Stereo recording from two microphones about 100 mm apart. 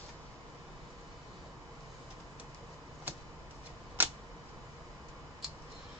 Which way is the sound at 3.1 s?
20° right (ahead or behind).